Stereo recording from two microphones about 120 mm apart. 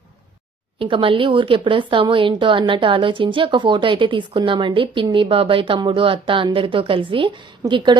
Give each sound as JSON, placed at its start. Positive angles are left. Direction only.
{"t": 0.8, "sound": "a woman's voice", "side_deg": -45}